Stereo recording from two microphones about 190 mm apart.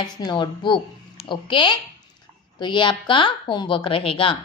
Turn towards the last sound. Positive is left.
turn(degrees=30)  # may be behind; listen again after turning